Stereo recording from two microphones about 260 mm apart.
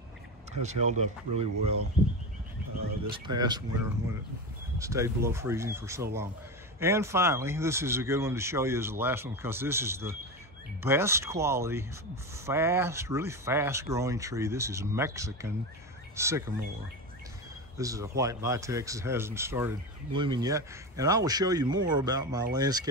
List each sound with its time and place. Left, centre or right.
0.5 s speech: right
3.1 s speech: centre
4.7 s speech: centre
17.7 s speech: centre